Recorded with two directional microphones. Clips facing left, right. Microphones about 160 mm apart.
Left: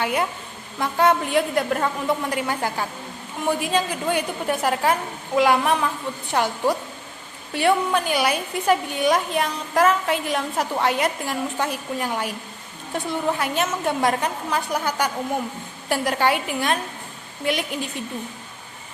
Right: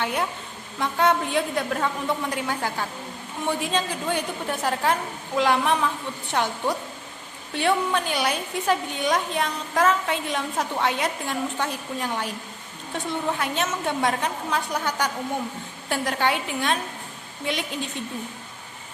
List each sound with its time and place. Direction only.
0.0 s a woman's voice: 5° left (ahead or behind)